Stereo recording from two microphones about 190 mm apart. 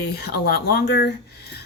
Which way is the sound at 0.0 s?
55° left (ahead or behind).